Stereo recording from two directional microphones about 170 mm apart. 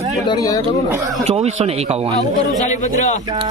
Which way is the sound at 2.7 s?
45° left (ahead or behind).